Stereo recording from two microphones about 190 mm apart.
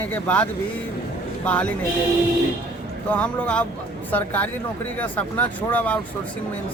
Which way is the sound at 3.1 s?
5° left (ahead or behind).